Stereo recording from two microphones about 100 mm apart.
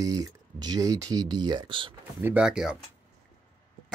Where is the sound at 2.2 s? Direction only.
10° right (ahead or behind).